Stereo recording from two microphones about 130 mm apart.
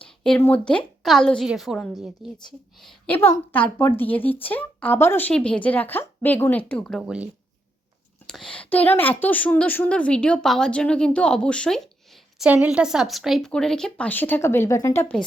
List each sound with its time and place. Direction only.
0.0 s a sound: 5° left (ahead or behind)
0.4 s a woman's voice: 10° left (ahead or behind)
3.1 s a woman's voice: 20° left (ahead or behind)
8.3 s a sound: 5° left (ahead or behind)
8.7 s a woman's voice: 15° left (ahead or behind)
12.5 s a woman's voice: 10° right (ahead or behind); by 15.0 s 25° left (ahead or behind)